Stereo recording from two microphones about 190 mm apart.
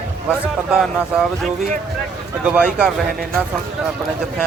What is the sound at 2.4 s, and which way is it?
Speech, 5° right (ahead or behind).